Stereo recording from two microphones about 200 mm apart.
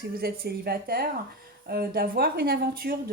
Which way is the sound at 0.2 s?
50° right (ahead or behind).